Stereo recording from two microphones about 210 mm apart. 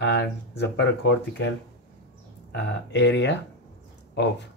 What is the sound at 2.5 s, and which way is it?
Speech, 55° left (ahead or behind).